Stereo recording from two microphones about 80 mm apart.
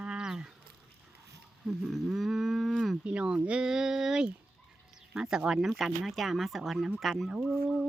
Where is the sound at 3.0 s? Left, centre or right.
Centre.